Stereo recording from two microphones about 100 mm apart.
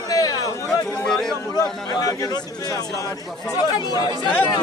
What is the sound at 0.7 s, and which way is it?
Chatter, 5° left (ahead or behind).